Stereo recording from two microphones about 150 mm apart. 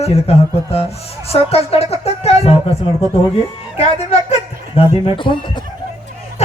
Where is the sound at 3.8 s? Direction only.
45° left (ahead or behind).